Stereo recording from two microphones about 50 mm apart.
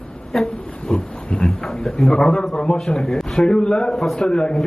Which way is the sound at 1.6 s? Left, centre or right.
Centre.